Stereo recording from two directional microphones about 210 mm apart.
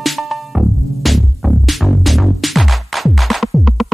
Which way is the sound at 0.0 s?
Centre (ahead or behind).